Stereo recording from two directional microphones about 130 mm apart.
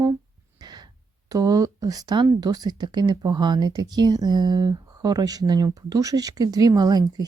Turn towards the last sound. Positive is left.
turn(degrees=-30)  # may be behind; listen again after turning